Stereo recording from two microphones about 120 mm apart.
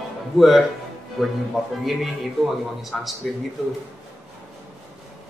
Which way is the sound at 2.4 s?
Centre (ahead or behind).